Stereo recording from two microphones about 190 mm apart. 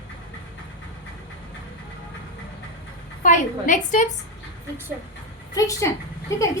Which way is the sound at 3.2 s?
40° left (ahead or behind).